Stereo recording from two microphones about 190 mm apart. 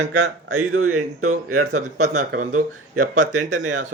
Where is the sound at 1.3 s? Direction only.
40° right (ahead or behind).